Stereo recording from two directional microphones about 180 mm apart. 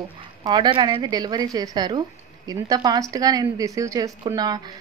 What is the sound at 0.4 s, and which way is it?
A woman's voice, 25° right (ahead or behind).